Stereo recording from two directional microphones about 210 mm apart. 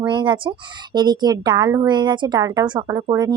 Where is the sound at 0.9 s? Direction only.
20° right (ahead or behind).